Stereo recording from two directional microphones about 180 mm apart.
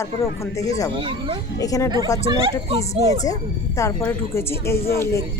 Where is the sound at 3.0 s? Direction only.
20° left (ahead or behind).